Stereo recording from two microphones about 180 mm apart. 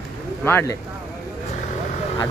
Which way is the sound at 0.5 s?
10° left (ahead or behind).